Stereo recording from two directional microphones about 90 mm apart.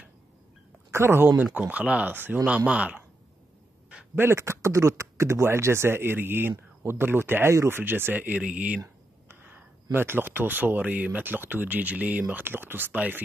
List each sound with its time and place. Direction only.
0.9 s speech: 25° right (ahead or behind)
1.4 s speech: 15° right (ahead or behind)
4.1 s speech: 25° right (ahead or behind)
8.8 s a sound: 20° right (ahead or behind)
9.9 s speech: 25° right (ahead or behind)